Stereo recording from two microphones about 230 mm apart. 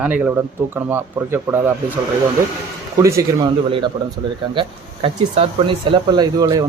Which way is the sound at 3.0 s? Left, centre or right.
Centre.